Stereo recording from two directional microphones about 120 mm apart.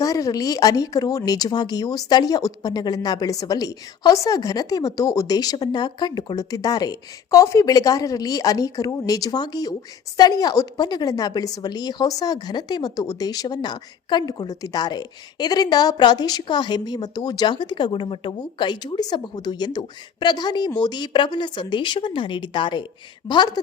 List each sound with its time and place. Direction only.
0.0 s speech: 30° left (ahead or behind)